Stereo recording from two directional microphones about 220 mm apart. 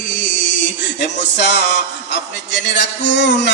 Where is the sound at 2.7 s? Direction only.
50° left (ahead or behind).